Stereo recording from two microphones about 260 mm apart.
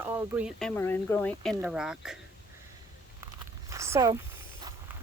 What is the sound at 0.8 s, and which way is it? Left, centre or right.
Speech, centre.